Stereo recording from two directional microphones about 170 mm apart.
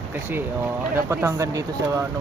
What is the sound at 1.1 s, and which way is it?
Speech, 15° right (ahead or behind).